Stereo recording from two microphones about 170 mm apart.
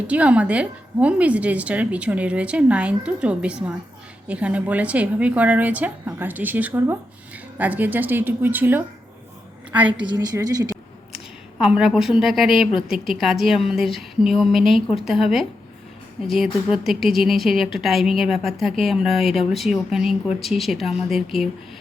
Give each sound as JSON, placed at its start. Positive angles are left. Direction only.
{"t": 0.1, "sound": "a woman's voice", "side_deg": -5}
{"t": 10.1, "sound": "a woman's voice", "side_deg": -20}
{"t": 11.6, "sound": "speech", "side_deg": -5}